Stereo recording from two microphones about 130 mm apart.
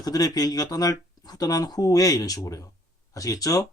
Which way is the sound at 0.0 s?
30° left (ahead or behind).